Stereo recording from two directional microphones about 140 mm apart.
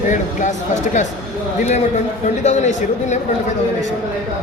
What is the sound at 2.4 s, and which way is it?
Speech, 55° left (ahead or behind).